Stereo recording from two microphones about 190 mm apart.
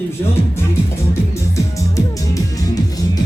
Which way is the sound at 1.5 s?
15° left (ahead or behind).